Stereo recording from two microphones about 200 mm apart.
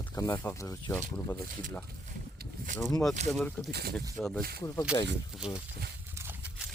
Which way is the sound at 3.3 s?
10° left (ahead or behind).